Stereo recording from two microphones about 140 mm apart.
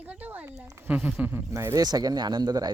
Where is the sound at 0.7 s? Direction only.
15° right (ahead or behind).